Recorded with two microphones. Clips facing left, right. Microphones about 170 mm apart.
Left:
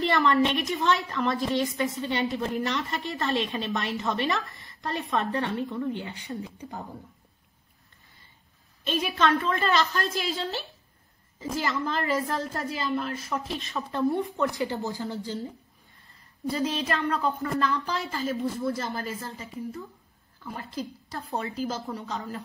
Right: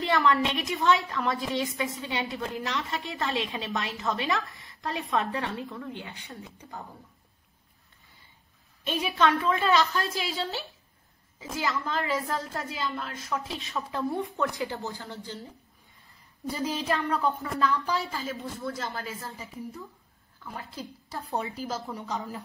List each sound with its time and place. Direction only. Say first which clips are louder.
0.0 s a woman's voice: left 2 dB; centre (ahead or behind)
8.8 s a woman's voice: even; 5° right (ahead or behind)
16.6 s a woman's voice: right 1 dB; centre (ahead or behind)
20.4 s a woman's voice: left 4 dB; 5° right (ahead or behind)
21.3 s a woman's voice: even; 15° right (ahead or behind)
21.6 s a woman's voice: left 2 dB; centre (ahead or behind)